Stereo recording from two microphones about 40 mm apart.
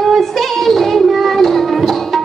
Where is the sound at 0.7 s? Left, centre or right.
Centre.